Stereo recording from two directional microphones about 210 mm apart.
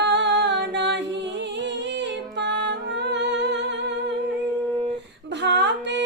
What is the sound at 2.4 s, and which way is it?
Music, 55° right (ahead or behind).